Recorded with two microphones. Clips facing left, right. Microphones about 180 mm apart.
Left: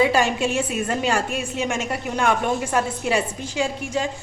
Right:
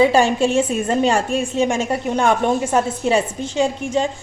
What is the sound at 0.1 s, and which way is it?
A woman's voice, 30° right (ahead or behind).